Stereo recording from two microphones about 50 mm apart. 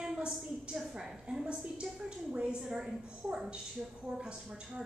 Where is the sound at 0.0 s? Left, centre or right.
Centre.